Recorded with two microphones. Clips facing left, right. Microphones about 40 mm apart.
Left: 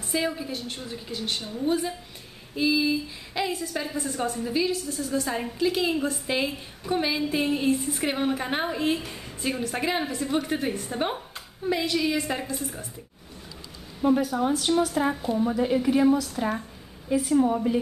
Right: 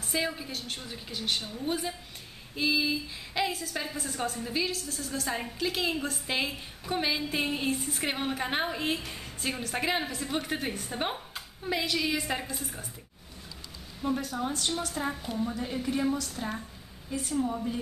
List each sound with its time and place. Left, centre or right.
0.1 s a woman's voice: centre
14.2 s a woman's voice: centre
15.3 s a woman's voice: centre
17.4 s a woman's voice: left